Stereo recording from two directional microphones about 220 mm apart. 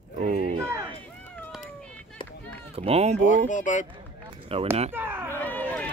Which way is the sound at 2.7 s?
25° right (ahead or behind).